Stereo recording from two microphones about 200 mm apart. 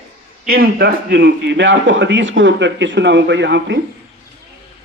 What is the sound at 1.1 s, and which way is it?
Speech, 65° right (ahead or behind).